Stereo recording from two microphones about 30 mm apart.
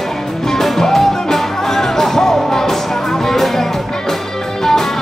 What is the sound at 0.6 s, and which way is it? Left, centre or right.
Music, centre.